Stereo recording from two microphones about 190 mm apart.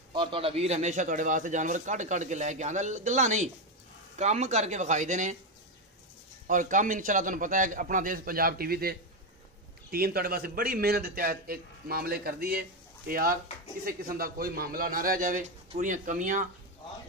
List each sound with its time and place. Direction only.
0.1 s a man's voice: 25° right (ahead or behind)
6.4 s a man's voice: 45° right (ahead or behind)